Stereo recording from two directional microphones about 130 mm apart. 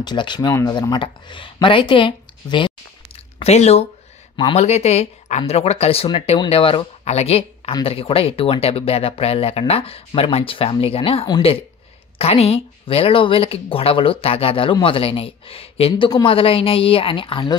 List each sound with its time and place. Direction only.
0.0 s speech: 35° left (ahead or behind)
0.5 s speech: 25° left (ahead or behind)
0.7 s speech: 35° left (ahead or behind)
3.4 s a woman's voice: 55° left (ahead or behind); by 17.6 s 40° left (ahead or behind)